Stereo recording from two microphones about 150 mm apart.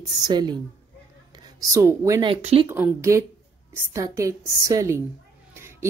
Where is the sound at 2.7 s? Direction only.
15° right (ahead or behind).